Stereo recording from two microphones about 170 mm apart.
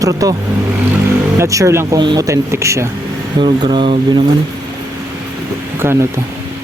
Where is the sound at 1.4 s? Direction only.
20° right (ahead or behind).